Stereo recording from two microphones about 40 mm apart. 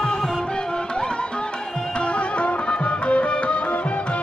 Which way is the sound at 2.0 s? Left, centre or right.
Left.